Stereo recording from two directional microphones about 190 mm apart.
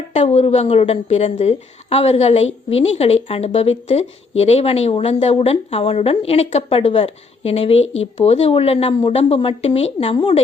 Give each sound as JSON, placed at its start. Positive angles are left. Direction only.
{"t": 0.1, "sound": "speech", "side_deg": 35}